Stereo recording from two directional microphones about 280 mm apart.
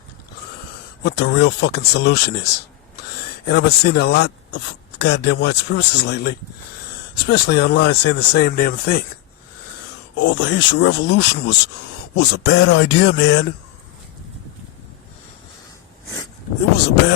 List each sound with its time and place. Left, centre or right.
1.0 s speech: left
10.2 s speech: left